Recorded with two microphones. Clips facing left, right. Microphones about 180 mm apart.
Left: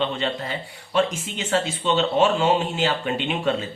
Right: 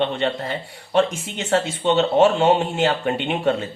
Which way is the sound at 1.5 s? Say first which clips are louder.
Right 3 dB; 55° right (ahead or behind).